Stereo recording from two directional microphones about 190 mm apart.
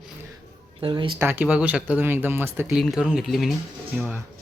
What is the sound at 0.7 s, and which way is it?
Speech, 25° right (ahead or behind).